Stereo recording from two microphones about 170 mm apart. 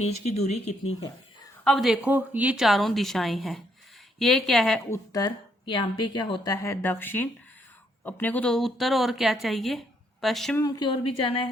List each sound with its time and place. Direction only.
0.0 s speech: 40° left (ahead or behind)
1.6 s speech: centre (ahead or behind)
4.9 s a woman's voice: 20° left (ahead or behind); by 10.6 s centre (ahead or behind)
10.6 s a woman's voice: 25° left (ahead or behind)